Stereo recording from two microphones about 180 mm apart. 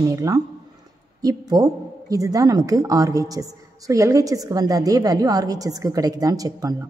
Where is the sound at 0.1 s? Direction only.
20° right (ahead or behind).